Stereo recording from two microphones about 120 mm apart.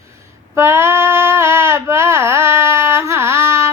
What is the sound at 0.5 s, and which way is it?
Female singing, 20° right (ahead or behind).